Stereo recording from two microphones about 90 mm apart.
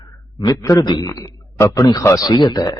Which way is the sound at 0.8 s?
50° left (ahead or behind).